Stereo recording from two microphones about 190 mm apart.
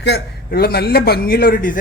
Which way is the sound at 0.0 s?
60° left (ahead or behind).